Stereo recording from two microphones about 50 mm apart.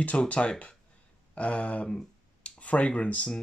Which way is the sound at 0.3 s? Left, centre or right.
Left.